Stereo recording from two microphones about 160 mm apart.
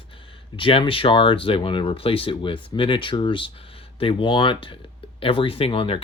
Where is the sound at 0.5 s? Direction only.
35° left (ahead or behind).